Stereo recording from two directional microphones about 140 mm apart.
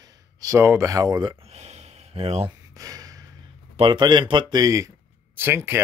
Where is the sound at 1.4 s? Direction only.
50° right (ahead or behind).